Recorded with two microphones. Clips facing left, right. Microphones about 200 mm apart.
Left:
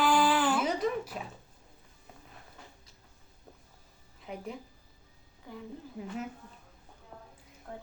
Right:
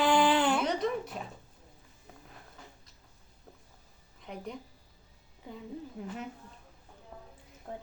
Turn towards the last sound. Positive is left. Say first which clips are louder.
# right 2 dB
turn(degrees=-20)  # may be behind; listen again after turning